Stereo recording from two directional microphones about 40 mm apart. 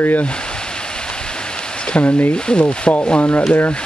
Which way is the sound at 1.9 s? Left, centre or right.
Left.